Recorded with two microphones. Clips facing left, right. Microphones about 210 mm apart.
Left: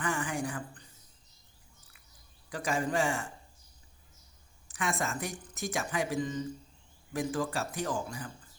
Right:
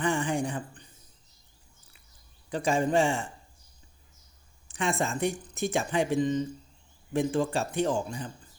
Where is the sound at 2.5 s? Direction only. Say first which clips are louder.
Right 6 dB; 25° right (ahead or behind).